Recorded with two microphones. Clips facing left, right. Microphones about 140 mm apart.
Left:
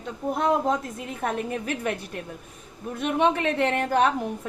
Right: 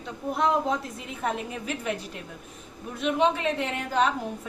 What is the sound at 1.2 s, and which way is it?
Speech, 55° left (ahead or behind).